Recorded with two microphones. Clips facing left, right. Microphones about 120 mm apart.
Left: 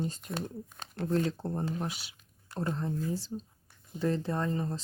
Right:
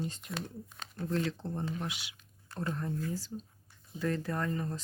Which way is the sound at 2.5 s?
25° left (ahead or behind).